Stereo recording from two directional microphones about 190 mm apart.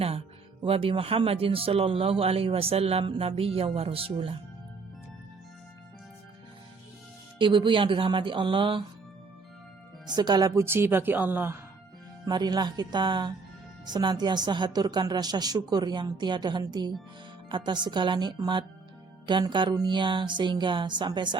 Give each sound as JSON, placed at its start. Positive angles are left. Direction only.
{"t": 0.6, "sound": "speech", "side_deg": -30}
{"t": 7.3, "sound": "speech", "side_deg": -25}
{"t": 10.1, "sound": "a woman's voice", "side_deg": -20}
{"t": 12.2, "sound": "speech", "side_deg": -20}